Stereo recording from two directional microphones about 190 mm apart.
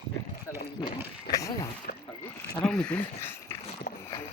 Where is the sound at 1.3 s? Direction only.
15° left (ahead or behind).